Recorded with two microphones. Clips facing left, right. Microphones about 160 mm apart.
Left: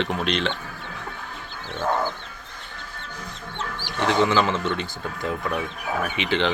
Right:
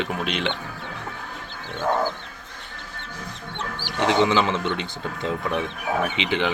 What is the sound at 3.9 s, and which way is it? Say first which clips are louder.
Speech: right 1 dB; 20° right (ahead or behind).